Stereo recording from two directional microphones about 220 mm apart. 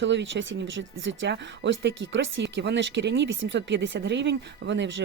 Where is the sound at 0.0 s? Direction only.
55° right (ahead or behind).